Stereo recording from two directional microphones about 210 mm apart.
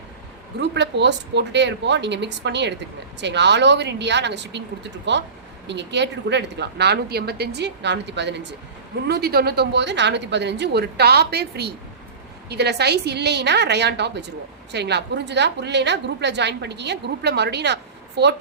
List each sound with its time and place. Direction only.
0.6 s a woman's voice: 55° right (ahead or behind)